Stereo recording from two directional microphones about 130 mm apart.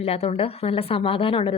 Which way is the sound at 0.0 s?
50° left (ahead or behind).